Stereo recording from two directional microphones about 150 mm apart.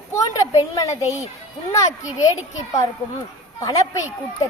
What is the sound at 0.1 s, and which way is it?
A woman's voice, 20° left (ahead or behind).